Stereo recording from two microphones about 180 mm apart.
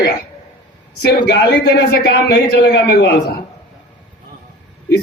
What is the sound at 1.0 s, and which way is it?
A man's voice, 65° left (ahead or behind).